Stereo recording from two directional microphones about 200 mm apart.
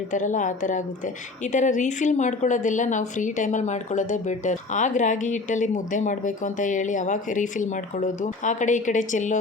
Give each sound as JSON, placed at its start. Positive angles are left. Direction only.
{"t": 0.1, "sound": "a woman's voice", "side_deg": 40}